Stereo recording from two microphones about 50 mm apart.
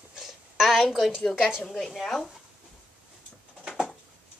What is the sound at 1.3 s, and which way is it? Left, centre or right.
Speech, centre.